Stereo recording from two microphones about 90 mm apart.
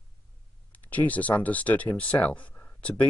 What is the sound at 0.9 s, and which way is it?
Speech, 15° left (ahead or behind).